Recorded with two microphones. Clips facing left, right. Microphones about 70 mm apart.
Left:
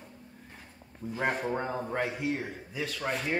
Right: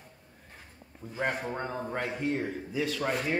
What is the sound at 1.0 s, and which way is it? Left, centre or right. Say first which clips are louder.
A man's voice: left 2 dB; centre.